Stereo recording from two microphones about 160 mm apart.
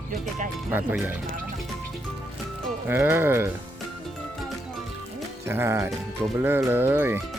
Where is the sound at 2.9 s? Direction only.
15° right (ahead or behind).